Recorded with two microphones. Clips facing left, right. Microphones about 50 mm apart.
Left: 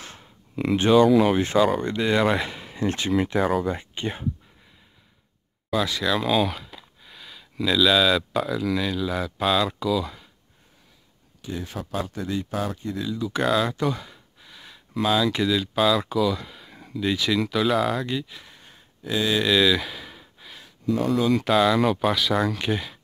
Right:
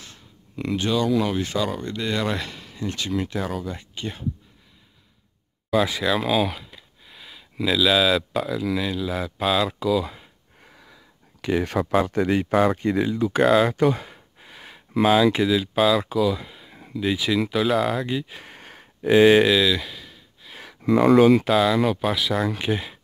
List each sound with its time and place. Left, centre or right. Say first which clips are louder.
0.7 s speech: left 7 dB; left
1.0 s speech: left 4 dB; centre
5.7 s speech: right 2 dB; centre
11.4 s speech: right 10 dB; right
13.0 s speech: right 5 dB; right
13.4 s speech: right 5 dB; centre
13.9 s a sound: right 3 dB; right
15.0 s speech: right 4 dB; centre
18.4 s a sound: right 6 dB; right
19.5 s speech: even; centre
20.0 s gasp: left 3 dB; left
20.6 s speech: right 6 dB; right
21.5 s speech: even; centre
22.5 s speech: right 1 dB; centre